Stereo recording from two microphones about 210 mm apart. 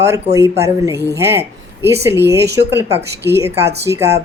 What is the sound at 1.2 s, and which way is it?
Speech, 10° right (ahead or behind).